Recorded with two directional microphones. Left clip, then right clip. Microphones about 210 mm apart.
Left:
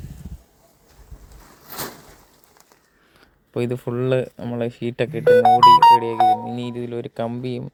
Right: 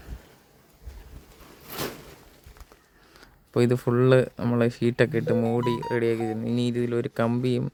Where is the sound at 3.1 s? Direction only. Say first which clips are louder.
Right 2 dB; 10° right (ahead or behind).